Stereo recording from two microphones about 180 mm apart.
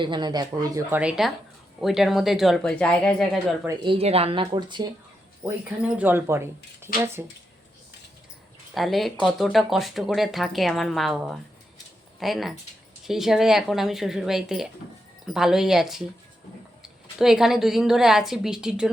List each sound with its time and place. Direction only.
0.0 s speech: 25° right (ahead or behind); by 3.2 s 5° left (ahead or behind)
3.9 s speech: 35° right (ahead or behind); by 7.2 s 15° right (ahead or behind)
8.7 s speech: centre (ahead or behind)